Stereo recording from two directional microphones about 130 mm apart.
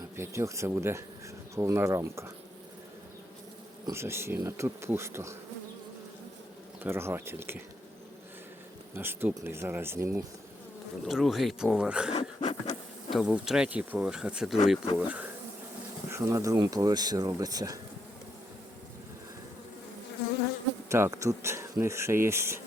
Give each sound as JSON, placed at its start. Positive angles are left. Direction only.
{"t": 0.2, "sound": "speech", "side_deg": -20}
{"t": 3.9, "sound": "speech", "side_deg": -20}
{"t": 6.8, "sound": "speech", "side_deg": -15}
{"t": 9.0, "sound": "speech", "side_deg": -15}
{"t": 11.0, "sound": "speech", "side_deg": 0}
{"t": 12.1, "sound": "pant", "side_deg": 60}
{"t": 13.1, "sound": "speech", "side_deg": -5}
{"t": 20.9, "sound": "speech", "side_deg": -25}